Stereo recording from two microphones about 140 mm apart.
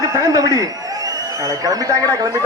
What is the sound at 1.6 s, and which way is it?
Speech, 25° right (ahead or behind).